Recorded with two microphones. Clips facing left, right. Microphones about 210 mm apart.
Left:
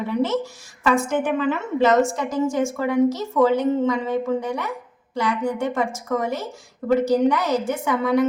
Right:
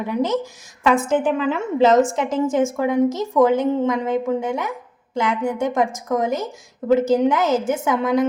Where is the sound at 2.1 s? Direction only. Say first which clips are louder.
Right 3 dB; 20° right (ahead or behind).